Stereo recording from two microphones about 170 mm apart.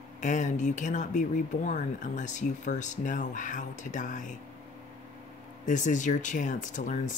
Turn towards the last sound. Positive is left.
turn(degrees=50)  # may be behind; listen again after turning